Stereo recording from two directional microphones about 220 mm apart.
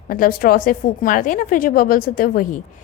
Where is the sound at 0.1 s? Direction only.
40° left (ahead or behind).